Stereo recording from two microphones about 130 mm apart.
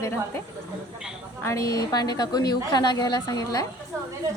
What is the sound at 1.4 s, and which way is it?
A woman's voice, 25° left (ahead or behind).